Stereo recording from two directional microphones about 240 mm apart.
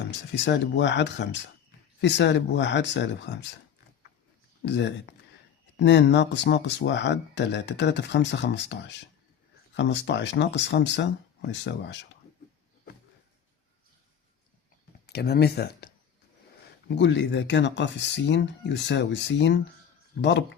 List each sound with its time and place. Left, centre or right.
0.0 s speech: left
4.6 s speech: left
15.0 s speech: left
16.9 s speech: left